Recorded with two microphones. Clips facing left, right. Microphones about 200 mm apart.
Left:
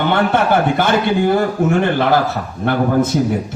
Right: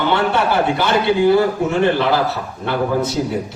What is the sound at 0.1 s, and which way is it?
A man's voice, 50° left (ahead or behind).